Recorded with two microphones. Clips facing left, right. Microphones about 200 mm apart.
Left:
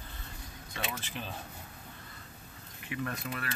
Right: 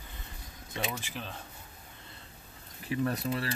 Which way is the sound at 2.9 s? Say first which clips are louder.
Right 6 dB; 35° right (ahead or behind).